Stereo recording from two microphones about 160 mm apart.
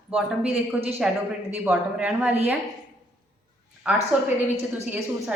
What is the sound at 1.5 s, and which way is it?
Speech, 10° right (ahead or behind).